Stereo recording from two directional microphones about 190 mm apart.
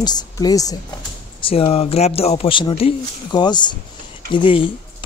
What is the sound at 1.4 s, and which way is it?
Speech, 30° left (ahead or behind).